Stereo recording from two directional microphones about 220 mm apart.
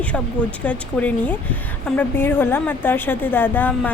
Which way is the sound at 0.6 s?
5° left (ahead or behind).